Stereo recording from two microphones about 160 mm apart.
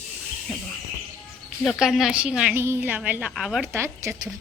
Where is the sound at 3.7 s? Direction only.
15° right (ahead or behind).